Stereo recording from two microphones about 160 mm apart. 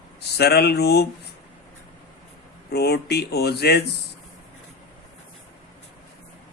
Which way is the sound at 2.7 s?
90° left.